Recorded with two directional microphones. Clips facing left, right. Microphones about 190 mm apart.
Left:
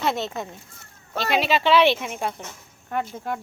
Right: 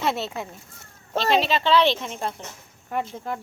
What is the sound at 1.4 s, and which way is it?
Speech, 10° left (ahead or behind).